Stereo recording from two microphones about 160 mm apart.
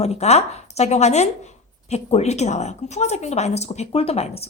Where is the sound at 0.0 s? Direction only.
40° left (ahead or behind).